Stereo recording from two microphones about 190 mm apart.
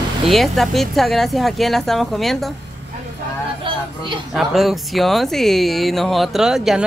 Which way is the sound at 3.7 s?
25° right (ahead or behind).